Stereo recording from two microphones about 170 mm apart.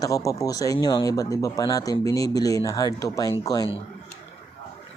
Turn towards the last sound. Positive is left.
turn(degrees=20)  # may be behind; listen again after turning